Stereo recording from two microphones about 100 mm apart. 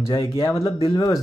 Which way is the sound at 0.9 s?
35° left (ahead or behind).